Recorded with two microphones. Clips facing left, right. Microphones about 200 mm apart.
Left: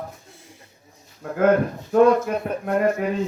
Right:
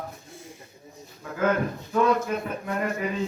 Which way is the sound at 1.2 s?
60° left (ahead or behind).